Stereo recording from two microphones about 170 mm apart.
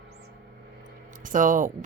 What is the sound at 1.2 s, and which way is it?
Speech, 50° right (ahead or behind).